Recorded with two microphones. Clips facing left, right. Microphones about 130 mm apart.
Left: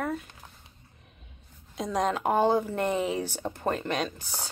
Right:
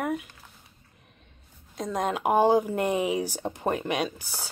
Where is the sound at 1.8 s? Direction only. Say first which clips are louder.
Left 1 dB; centre (ahead or behind).